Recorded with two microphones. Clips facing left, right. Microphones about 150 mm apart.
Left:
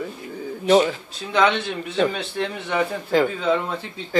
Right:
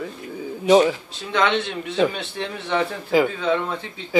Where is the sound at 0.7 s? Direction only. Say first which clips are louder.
Right 2 dB; 15° right (ahead or behind).